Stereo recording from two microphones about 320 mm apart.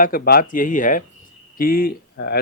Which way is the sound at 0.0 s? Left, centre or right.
Left.